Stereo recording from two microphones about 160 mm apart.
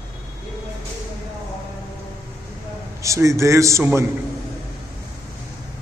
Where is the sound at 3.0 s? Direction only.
20° right (ahead or behind).